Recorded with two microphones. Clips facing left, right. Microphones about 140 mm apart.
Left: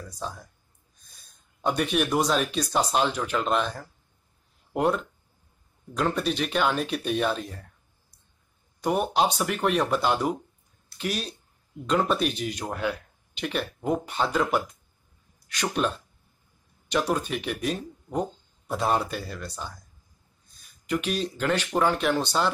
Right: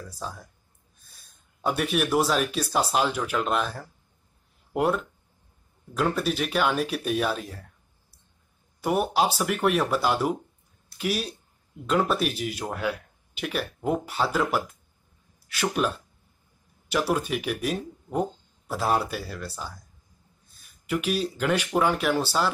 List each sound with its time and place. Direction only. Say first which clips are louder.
1.6 s speech: even; 5° right (ahead or behind)
16.9 s speech: right 1 dB; 10° right (ahead or behind)
20.8 s speech: right 1 dB; 5° right (ahead or behind)